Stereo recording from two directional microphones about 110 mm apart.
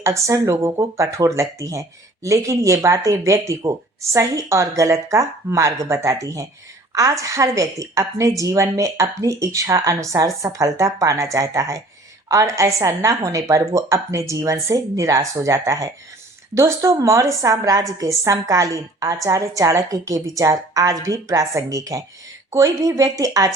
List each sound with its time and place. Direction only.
0.0 s a woman's voice: 30° right (ahead or behind)